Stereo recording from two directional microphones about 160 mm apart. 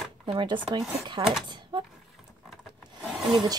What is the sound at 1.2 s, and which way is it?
Speech, 20° right (ahead or behind).